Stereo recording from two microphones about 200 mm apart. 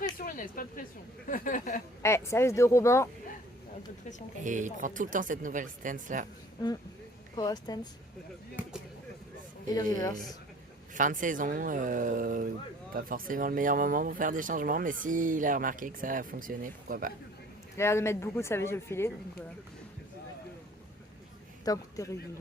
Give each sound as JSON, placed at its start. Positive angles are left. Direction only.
{"t": 0.2, "sound": "speech", "side_deg": 45}
{"t": 2.0, "sound": "speech", "side_deg": 15}
{"t": 4.4, "sound": "speech", "side_deg": -40}
{"t": 7.3, "sound": "speech", "side_deg": 20}
{"t": 8.6, "sound": "a sound", "side_deg": -10}
{"t": 9.7, "sound": "speech", "side_deg": 20}
{"t": 10.9, "sound": "speech", "side_deg": -40}
{"t": 17.7, "sound": "speech", "side_deg": 15}
{"t": 21.6, "sound": "a man's voice", "side_deg": 15}